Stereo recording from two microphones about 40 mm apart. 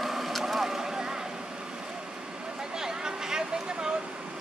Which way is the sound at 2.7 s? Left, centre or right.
Centre.